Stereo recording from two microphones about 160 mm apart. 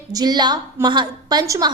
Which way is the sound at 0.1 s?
25° right (ahead or behind).